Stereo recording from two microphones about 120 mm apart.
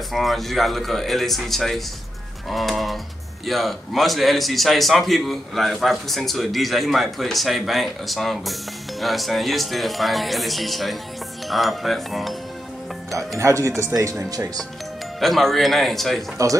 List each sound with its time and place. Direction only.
0.1 s a man's voice: centre (ahead or behind)
13.4 s speech: 25° right (ahead or behind)
15.1 s a man's voice: centre (ahead or behind)